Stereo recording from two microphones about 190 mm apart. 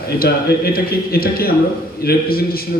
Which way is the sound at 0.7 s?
50° left (ahead or behind).